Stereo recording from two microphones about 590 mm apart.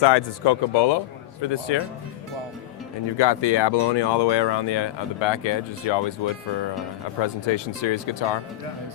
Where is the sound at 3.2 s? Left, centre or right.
Left.